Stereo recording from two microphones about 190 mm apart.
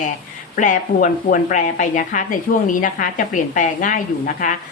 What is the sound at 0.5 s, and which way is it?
Speech, 40° left (ahead or behind).